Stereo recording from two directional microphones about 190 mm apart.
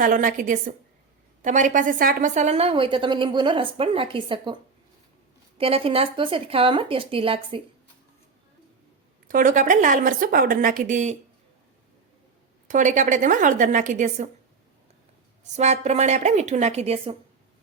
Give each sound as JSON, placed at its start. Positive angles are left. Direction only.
{"t": 0.0, "sound": "a woman's voice", "side_deg": -45}
{"t": 5.5, "sound": "a woman's voice", "side_deg": -30}
{"t": 9.2, "sound": "a woman's voice", "side_deg": -45}
{"t": 12.6, "sound": "a woman's voice", "side_deg": -40}
{"t": 15.5, "sound": "a woman's voice", "side_deg": -35}